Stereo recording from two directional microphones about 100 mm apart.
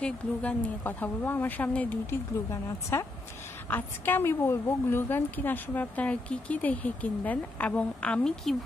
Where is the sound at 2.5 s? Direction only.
30° left (ahead or behind).